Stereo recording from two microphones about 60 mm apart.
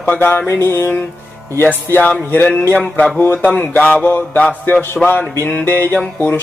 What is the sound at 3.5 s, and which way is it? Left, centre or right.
Music, left.